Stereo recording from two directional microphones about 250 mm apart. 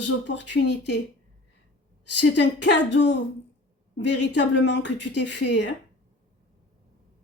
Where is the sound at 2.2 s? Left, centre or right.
Left.